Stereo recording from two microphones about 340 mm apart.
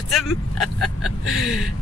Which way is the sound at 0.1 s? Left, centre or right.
Centre.